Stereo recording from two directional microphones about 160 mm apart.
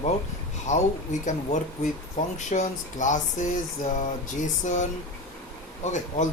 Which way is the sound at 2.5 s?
50° left (ahead or behind).